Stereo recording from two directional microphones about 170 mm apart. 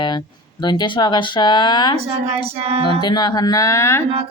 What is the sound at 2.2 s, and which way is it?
Music, 35° right (ahead or behind).